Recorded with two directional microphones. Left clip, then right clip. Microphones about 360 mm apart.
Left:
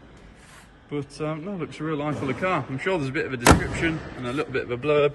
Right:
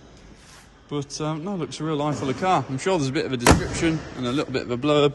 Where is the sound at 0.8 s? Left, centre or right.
Centre.